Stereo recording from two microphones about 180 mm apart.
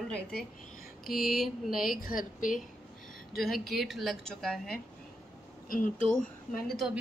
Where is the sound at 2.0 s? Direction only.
50° left (ahead or behind).